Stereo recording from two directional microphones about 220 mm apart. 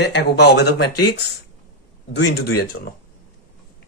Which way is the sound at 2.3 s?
45° left (ahead or behind).